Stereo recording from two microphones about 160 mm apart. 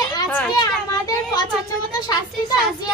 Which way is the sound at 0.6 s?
25° left (ahead or behind).